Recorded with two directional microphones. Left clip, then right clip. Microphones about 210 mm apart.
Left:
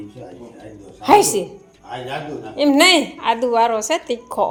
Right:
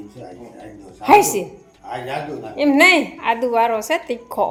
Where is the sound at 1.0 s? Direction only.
5° left (ahead or behind).